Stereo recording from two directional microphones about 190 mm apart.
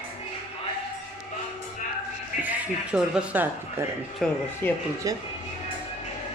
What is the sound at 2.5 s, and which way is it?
Speech, 5° right (ahead or behind).